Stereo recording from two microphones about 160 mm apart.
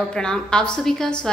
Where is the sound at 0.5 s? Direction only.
5° left (ahead or behind).